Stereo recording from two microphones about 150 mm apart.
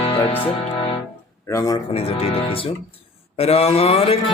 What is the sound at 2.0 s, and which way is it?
Music, 40° left (ahead or behind).